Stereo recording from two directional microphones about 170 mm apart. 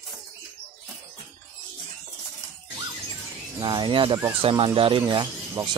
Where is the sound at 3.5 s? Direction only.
25° right (ahead or behind).